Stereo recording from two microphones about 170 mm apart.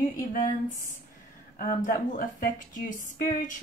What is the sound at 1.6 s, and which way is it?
Speech, 55° left (ahead or behind).